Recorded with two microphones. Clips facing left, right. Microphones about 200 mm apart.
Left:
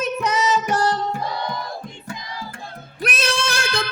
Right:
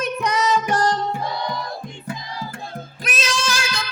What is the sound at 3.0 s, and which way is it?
Singing, 60° left (ahead or behind).